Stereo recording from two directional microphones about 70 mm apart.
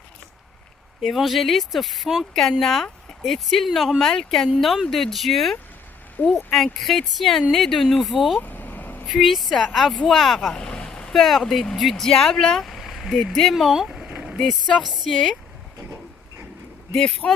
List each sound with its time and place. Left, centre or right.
1.0 s speech: centre
8.4 s vehicle: left
9.0 s speech: centre
10.5 s vehicle: centre
11.2 s speech: centre
14.7 s speech: centre
17.2 s speech: centre